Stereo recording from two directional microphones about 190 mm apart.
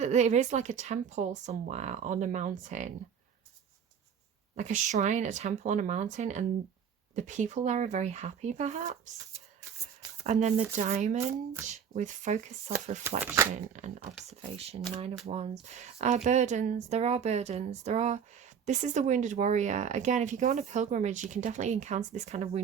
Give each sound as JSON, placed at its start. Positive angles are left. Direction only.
{"t": 0.0, "sound": "speech", "side_deg": -35}
{"t": 4.5, "sound": "speech", "side_deg": -40}
{"t": 10.8, "sound": "speech", "side_deg": -40}
{"t": 13.1, "sound": "speech", "side_deg": -10}
{"t": 13.7, "sound": "speech", "side_deg": -40}